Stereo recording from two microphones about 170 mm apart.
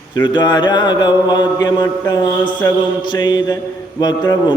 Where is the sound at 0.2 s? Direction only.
25° left (ahead or behind).